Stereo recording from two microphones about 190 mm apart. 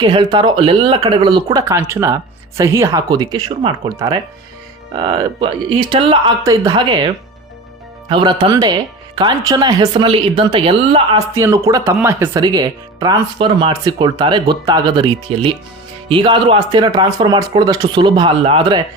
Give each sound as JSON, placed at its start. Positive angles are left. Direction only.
{"t": 0.0, "sound": "speech", "side_deg": -25}
{"t": 8.1, "sound": "speech", "side_deg": -25}
{"t": 11.3, "sound": "speech", "side_deg": -15}